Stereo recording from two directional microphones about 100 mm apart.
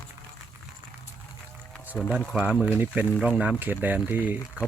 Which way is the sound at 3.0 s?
15° right (ahead or behind).